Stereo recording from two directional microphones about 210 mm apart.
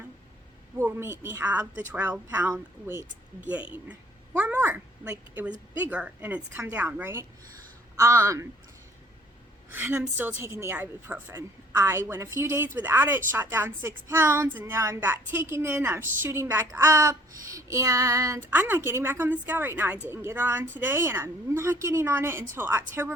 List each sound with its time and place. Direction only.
0.8 s a woman's voice: 10° right (ahead or behind)
9.7 s a woman's voice: 10° right (ahead or behind)